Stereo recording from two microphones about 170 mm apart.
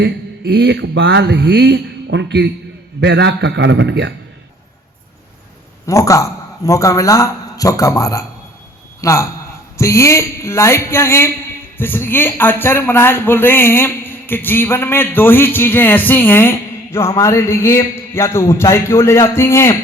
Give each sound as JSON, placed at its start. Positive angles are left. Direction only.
{"t": 0.0, "sound": "a man's voice", "side_deg": -85}
{"t": 5.8, "sound": "a man's voice", "side_deg": 20}